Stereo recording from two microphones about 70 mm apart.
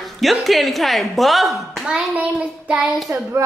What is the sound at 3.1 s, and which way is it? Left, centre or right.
Speech, right.